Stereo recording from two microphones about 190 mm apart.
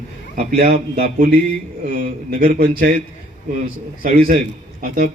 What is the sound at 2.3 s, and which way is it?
Speech, 50° right (ahead or behind).